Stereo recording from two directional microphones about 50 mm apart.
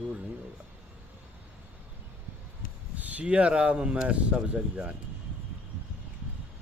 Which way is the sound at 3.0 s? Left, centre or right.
Right.